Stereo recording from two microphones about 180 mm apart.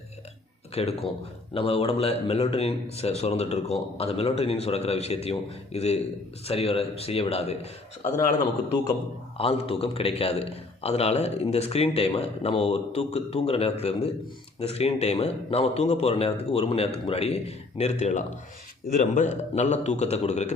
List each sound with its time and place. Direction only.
0.7 s a man's voice: 35° left (ahead or behind)
9.4 s a man's voice: 30° left (ahead or behind)